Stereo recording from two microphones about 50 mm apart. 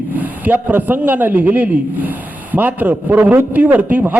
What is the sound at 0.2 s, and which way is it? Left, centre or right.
A man's voice, right.